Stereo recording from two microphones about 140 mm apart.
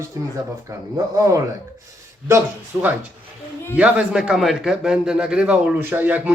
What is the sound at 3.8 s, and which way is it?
A man's voice, 10° right (ahead or behind).